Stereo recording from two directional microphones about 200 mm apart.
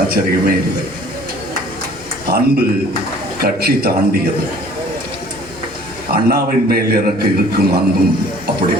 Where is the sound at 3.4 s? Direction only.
50° right (ahead or behind).